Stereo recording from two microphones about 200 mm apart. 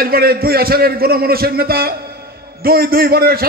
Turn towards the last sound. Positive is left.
turn(degrees=-50)  # may be behind; listen again after turning